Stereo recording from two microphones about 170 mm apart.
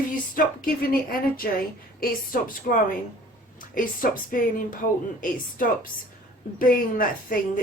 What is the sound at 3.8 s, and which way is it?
Speech, 55° left (ahead or behind).